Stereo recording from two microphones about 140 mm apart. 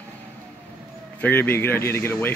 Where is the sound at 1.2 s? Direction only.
15° left (ahead or behind).